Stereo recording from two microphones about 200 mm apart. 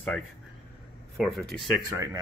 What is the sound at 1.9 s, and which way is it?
Speech, 15° right (ahead or behind).